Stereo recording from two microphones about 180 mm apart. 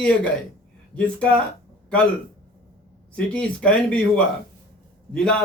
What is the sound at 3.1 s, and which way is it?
A man's voice, 5° left (ahead or behind).